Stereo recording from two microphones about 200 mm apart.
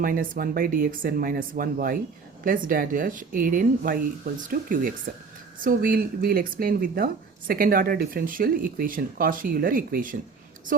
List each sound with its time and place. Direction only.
0.0 s speech: 45° right (ahead or behind)